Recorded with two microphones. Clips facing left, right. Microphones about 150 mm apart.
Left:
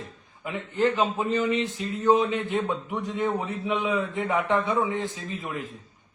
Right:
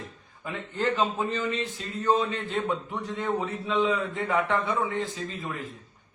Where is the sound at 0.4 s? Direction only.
15° left (ahead or behind).